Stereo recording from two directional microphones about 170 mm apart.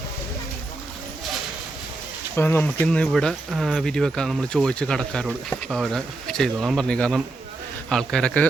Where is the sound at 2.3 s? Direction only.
10° left (ahead or behind).